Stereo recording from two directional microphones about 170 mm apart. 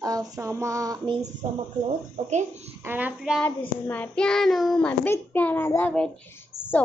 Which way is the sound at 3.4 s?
10° left (ahead or behind).